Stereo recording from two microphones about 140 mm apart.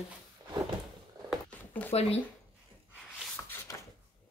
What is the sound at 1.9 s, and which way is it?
Speech, 45° left (ahead or behind).